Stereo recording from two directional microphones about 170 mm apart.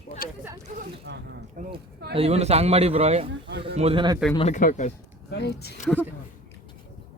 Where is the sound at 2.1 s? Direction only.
35° right (ahead or behind).